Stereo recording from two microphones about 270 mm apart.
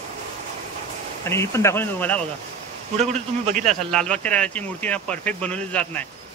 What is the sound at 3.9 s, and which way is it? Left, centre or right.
Speech, centre.